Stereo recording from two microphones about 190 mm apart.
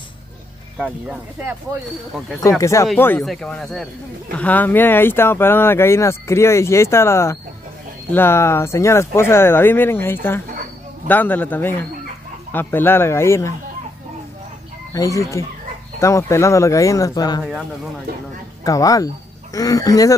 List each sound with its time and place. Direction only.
0.7 s speech: 5° right (ahead or behind)
2.6 s speech: 15° left (ahead or behind)
15.0 s speech: 15° left (ahead or behind)
18.6 s speech: 20° left (ahead or behind)